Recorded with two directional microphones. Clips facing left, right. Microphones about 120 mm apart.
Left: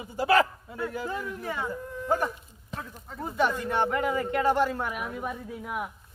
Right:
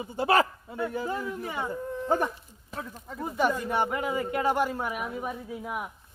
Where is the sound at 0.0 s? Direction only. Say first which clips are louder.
Left 1 dB; 25° right (ahead or behind).